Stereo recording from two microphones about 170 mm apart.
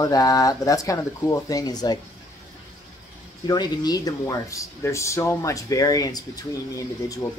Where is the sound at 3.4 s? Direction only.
25° left (ahead or behind).